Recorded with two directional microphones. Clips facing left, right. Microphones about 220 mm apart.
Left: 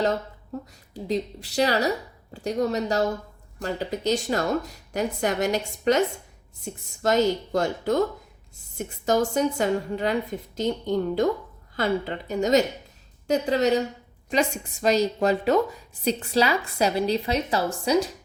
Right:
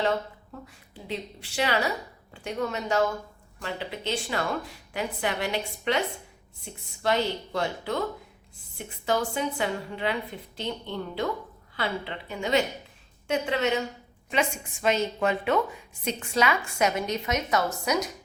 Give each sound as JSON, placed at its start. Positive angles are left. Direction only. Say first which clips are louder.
{"t": 0.5, "sound": "a woman's voice", "louder": "left 10 dB", "side_deg": 40}
{"t": 7.0, "sound": "a woman's voice", "louder": "left 5 dB", "side_deg": 45}